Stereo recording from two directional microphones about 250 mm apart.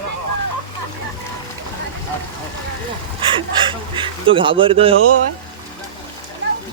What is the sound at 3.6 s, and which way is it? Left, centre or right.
Speech, centre.